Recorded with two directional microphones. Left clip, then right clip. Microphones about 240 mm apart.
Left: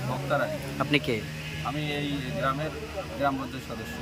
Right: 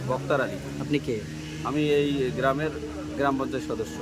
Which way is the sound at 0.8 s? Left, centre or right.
Centre.